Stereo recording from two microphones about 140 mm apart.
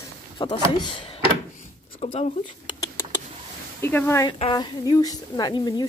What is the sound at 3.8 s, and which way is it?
Speech, 15° left (ahead or behind).